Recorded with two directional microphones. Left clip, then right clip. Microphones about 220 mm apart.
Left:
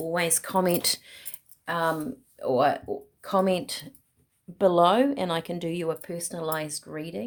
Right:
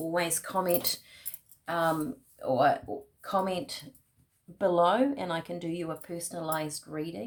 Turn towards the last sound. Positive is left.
turn(degrees=45)  # may be behind; listen again after turning